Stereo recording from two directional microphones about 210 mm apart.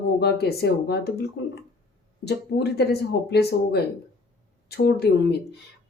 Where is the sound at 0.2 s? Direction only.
50° left (ahead or behind).